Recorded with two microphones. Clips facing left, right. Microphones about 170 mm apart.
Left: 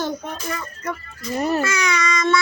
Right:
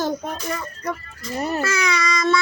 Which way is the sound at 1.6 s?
35° right (ahead or behind).